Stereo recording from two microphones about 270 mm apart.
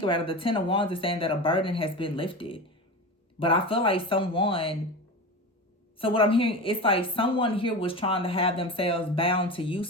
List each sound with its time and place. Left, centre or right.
0.0 s a woman's voice: centre
6.0 s a woman's voice: centre